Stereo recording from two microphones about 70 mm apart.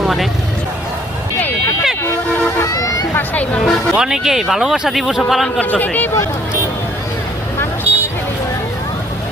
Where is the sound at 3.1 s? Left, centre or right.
Left.